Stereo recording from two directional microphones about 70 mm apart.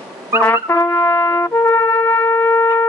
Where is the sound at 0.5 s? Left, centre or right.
Left.